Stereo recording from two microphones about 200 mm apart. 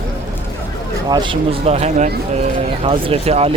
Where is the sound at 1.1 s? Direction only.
20° right (ahead or behind).